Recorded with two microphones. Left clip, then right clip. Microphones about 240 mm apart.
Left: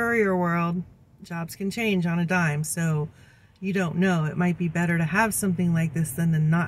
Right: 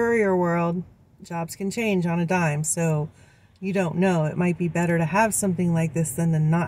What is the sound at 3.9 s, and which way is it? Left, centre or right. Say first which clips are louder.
Speech: right 3 dB; left.